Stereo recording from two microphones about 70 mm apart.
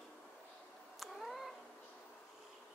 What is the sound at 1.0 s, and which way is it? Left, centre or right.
Cat, centre.